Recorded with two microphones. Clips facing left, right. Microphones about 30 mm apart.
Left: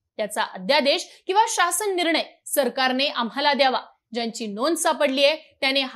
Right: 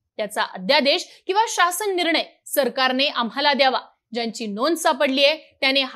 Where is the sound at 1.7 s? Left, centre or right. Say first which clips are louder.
Right 2 dB; right.